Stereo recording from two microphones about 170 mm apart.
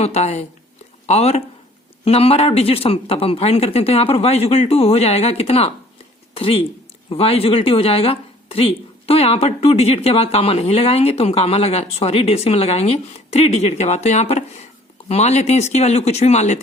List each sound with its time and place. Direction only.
0.0 s speech: 40° left (ahead or behind)